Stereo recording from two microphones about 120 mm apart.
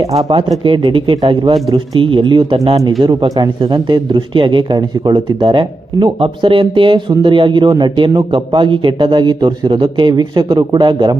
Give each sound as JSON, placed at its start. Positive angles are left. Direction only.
{"t": 0.3, "sound": "speech", "side_deg": -45}